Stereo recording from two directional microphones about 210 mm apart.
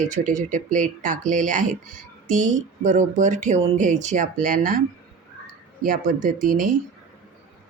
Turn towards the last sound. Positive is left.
turn(degrees=-40)  # may be behind; listen again after turning